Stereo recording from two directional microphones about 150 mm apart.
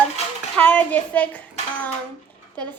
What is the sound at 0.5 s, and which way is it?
A child's voice, 10° left (ahead or behind).